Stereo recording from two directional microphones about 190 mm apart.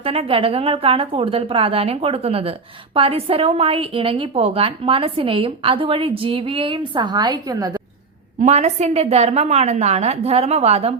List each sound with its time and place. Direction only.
0.0 s a woman's voice: 30° right (ahead or behind)
8.4 s a woman's voice: 35° right (ahead or behind)